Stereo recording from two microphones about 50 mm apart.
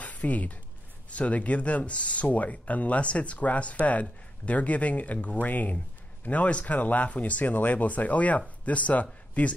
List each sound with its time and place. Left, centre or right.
0.0 s speech: left